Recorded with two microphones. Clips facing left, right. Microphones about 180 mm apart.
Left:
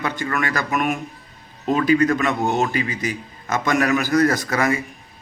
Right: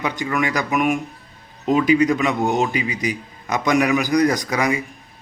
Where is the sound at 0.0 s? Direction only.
15° right (ahead or behind).